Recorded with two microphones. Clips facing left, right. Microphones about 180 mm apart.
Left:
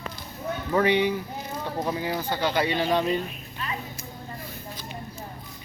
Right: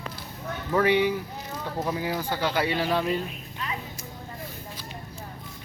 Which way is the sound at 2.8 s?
20° left (ahead or behind).